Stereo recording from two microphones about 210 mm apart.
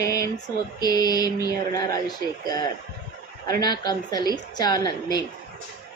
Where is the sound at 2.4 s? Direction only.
20° left (ahead or behind).